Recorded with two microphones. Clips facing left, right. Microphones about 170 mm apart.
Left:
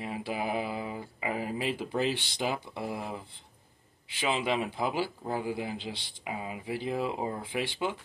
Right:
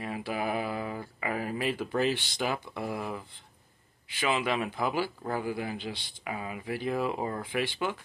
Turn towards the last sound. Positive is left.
turn(degrees=25)  # may be behind; listen again after turning